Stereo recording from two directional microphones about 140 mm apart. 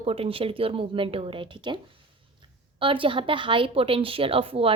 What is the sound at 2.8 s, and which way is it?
A woman's voice, 40° right (ahead or behind).